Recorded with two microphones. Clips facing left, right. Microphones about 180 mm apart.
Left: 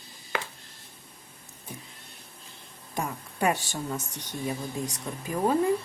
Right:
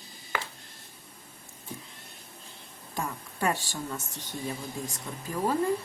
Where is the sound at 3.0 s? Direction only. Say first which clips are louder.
Left 3 dB; 15° left (ahead or behind).